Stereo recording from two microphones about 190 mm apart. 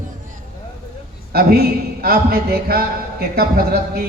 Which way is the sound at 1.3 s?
55° right (ahead or behind).